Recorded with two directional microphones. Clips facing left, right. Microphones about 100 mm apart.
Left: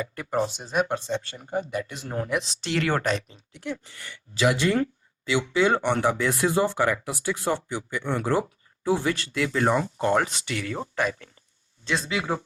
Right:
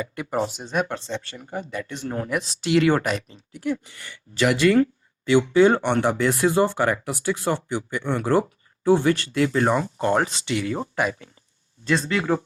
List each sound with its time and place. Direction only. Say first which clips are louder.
0.0 s speech: right 2 dB; 20° right (ahead or behind)
0.3 s speech: even; 5° right (ahead or behind)
0.8 s speech: left 1 dB; 15° left (ahead or behind)
2.0 s speech: right 4 dB; centre (ahead or behind)
4.4 s speech: right 3 dB; 65° right (ahead or behind)
5.2 s speech: right 6 dB; 45° right (ahead or behind)
5.9 s speech: right 2 dB; 60° right (ahead or behind); by 10.3 s 40° right (ahead or behind)
10.4 s speech: right 5 dB; 20° right (ahead or behind)
11.9 s speech: right 5 dB; 5° left (ahead or behind)